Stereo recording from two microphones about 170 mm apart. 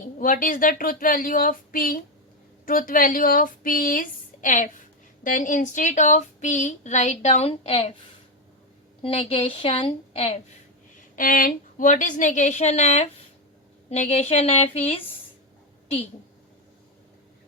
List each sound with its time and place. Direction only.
0.2 s a woman's voice: 55° left (ahead or behind); by 7.9 s 35° left (ahead or behind)
9.0 s a woman's voice: 35° left (ahead or behind)
11.2 s a woman's voice: 55° left (ahead or behind); by 15.0 s 35° left (ahead or behind)